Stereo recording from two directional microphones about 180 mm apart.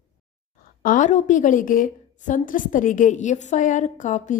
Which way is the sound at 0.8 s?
45° left (ahead or behind).